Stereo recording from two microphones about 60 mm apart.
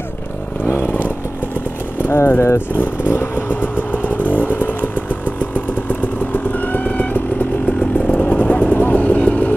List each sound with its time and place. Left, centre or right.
0.7 s vehicle: left
2.0 s speech: left
3.1 s vehicle: left